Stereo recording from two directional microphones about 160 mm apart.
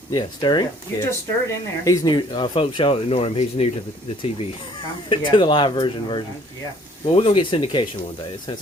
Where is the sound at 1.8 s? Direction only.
20° left (ahead or behind); by 3.7 s 40° left (ahead or behind).